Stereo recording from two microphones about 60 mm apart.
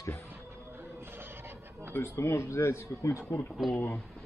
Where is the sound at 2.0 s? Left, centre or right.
Left.